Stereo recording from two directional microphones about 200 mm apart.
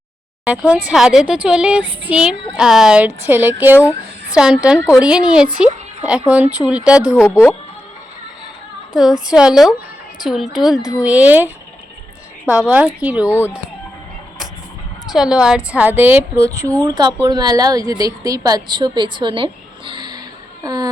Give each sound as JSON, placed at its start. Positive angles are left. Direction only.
{"t": 0.4, "sound": "a woman's voice", "side_deg": -5}
{"t": 7.2, "sound": "speech", "side_deg": 10}
{"t": 9.0, "sound": "a woman's voice", "side_deg": 0}
{"t": 13.2, "sound": "speech", "side_deg": 10}
{"t": 15.0, "sound": "a woman's voice", "side_deg": 0}
{"t": 20.7, "sound": "a sound", "side_deg": -20}